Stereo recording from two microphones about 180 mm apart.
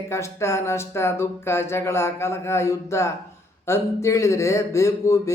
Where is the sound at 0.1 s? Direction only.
15° left (ahead or behind).